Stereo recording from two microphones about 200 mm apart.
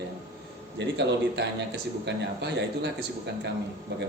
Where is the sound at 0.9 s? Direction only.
60° right (ahead or behind).